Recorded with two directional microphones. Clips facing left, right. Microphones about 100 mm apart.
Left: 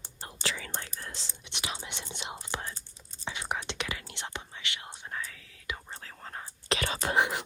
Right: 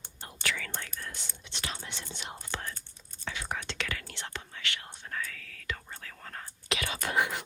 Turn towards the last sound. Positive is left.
turn(degrees=20)  # may be behind; listen again after turning